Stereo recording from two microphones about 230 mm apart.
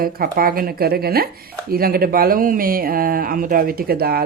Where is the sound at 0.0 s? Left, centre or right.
Right.